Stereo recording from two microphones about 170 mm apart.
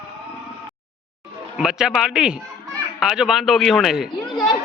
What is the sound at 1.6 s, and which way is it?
Speech, 5° right (ahead or behind).